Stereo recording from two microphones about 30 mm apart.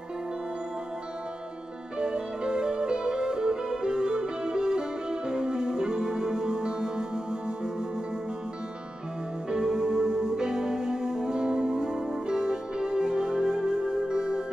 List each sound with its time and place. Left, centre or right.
2.0 s music: right
9.5 s music: right